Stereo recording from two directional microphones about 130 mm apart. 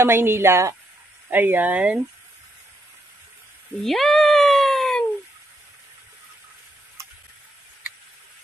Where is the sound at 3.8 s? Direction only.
Centre (ahead or behind).